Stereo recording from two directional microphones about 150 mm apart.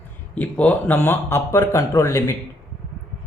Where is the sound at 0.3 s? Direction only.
10° left (ahead or behind).